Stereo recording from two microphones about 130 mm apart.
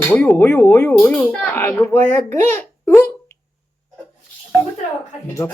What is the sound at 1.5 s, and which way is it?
Speech, 20° left (ahead or behind).